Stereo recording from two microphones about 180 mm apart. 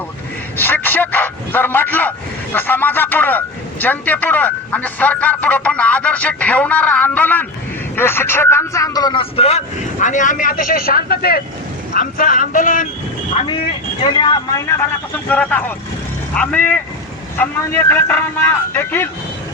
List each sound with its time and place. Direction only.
0.5 s speech: 10° left (ahead or behind); by 12.9 s 50° left (ahead or behind)
13.4 s speech: 30° left (ahead or behind)
15.1 s speech: 10° left (ahead or behind)